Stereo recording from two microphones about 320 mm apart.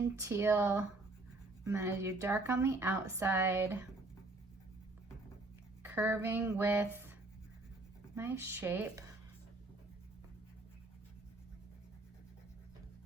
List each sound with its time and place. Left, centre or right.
0.2 s speech: centre
5.9 s speech: centre
8.1 s speech: centre